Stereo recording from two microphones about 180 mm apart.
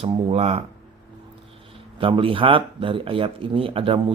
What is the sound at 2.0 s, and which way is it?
Speech, 30° right (ahead or behind).